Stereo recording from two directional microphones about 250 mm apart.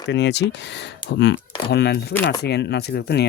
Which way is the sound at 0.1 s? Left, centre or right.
Left.